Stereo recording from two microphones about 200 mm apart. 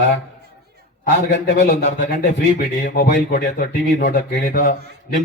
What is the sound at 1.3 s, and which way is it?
A man's voice, 55° left (ahead or behind).